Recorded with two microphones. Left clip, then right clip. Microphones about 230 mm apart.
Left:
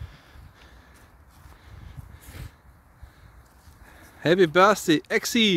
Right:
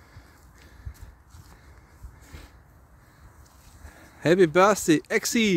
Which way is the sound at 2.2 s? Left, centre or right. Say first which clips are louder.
Left 2 dB; left.